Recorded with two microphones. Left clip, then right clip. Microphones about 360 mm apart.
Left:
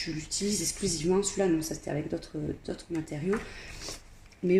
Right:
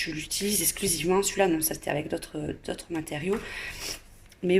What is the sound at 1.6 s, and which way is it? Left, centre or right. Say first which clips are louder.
Speech: right 4 dB; right.